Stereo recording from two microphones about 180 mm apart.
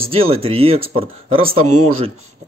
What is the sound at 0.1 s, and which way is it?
Speech, 30° right (ahead or behind).